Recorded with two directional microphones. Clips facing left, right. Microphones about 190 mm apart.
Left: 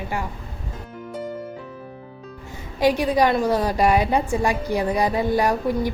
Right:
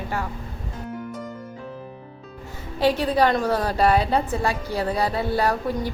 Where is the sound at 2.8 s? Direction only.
10° left (ahead or behind).